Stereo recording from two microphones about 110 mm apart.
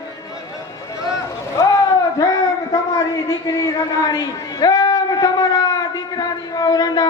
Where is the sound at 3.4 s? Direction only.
35° left (ahead or behind).